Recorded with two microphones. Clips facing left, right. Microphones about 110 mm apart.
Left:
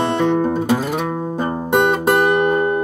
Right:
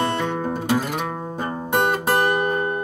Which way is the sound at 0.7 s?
5° left (ahead or behind).